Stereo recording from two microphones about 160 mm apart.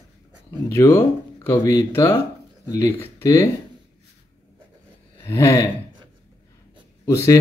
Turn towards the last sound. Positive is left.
turn(degrees=15)  # may be behind; listen again after turning